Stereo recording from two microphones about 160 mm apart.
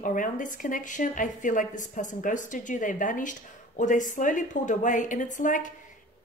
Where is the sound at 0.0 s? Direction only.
55° left (ahead or behind).